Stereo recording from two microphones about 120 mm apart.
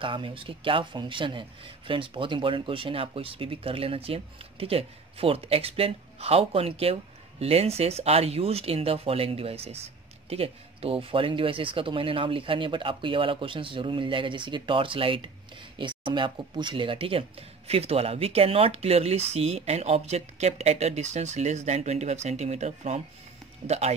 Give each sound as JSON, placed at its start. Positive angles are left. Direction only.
{"t": 0.0, "sound": "speech", "side_deg": -45}